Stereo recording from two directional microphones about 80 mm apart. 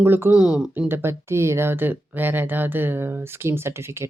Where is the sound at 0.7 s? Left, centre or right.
Right.